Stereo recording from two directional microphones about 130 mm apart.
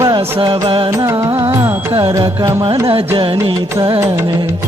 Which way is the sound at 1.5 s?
20° right (ahead or behind).